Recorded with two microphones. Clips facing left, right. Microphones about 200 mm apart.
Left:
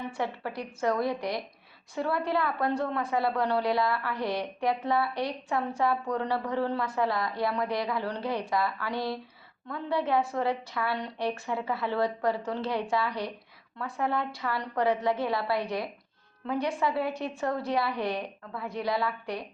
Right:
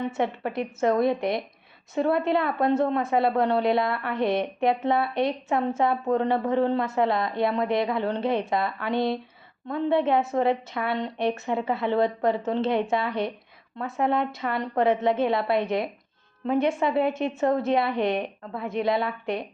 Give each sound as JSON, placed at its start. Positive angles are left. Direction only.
{"t": 0.0, "sound": "a woman's voice", "side_deg": -20}